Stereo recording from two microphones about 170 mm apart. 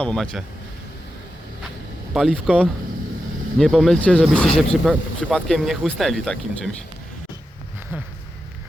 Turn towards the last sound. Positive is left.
turn(degrees=5)  # may be behind; listen again after turning